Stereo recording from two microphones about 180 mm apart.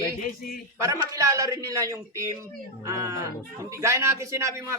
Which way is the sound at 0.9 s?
15° right (ahead or behind).